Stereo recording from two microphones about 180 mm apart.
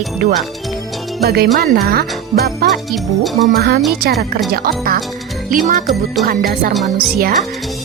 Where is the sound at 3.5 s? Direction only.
60° right (ahead or behind).